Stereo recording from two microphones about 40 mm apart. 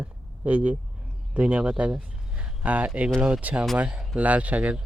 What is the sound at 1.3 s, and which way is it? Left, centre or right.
Speech, right.